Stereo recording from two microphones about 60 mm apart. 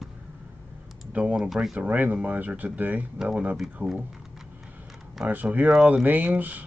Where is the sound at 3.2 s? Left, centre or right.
Centre.